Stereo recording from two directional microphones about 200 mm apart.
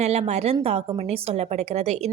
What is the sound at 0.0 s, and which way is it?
Speech, 35° right (ahead or behind).